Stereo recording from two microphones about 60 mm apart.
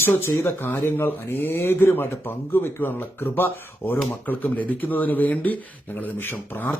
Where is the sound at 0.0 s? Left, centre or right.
Left.